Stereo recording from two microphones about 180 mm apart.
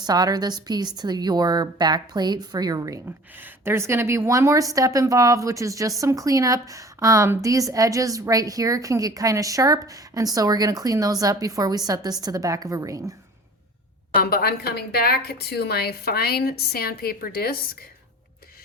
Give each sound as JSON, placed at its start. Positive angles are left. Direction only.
{"t": 0.0, "sound": "a woman's voice", "side_deg": -20}
{"t": 14.2, "sound": "a woman's voice", "side_deg": 60}